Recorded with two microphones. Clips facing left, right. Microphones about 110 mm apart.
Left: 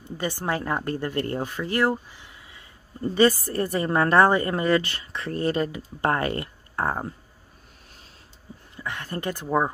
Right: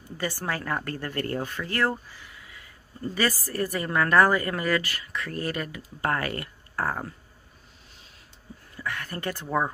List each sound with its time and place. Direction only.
0.2 s speech: 20° left (ahead or behind)
8.7 s speech: 20° left (ahead or behind)